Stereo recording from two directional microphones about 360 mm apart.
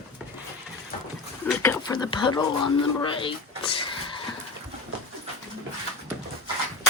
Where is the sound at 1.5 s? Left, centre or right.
Centre.